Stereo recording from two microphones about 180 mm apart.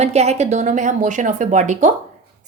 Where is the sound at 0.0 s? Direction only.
35° right (ahead or behind).